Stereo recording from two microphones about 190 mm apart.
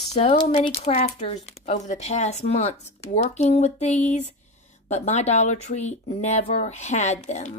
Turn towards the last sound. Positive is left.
turn(degrees=40)  # may be behind; listen again after turning